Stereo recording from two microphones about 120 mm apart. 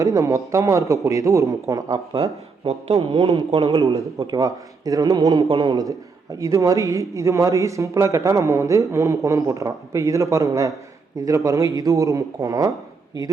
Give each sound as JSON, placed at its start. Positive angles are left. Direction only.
{"t": 0.0, "sound": "speech", "side_deg": -30}
{"t": 2.1, "sound": "speech", "side_deg": -50}
{"t": 4.2, "sound": "a man's voice", "side_deg": -30}
{"t": 6.4, "sound": "a man's voice", "side_deg": -25}